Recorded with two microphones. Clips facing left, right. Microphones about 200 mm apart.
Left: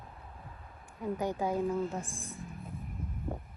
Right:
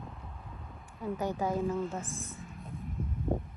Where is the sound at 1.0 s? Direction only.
15° left (ahead or behind).